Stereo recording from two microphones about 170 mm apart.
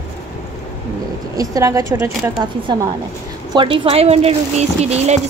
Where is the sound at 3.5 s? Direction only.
30° right (ahead or behind).